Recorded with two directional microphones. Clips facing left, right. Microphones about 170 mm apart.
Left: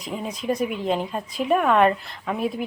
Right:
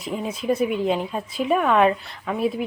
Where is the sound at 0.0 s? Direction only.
5° right (ahead or behind).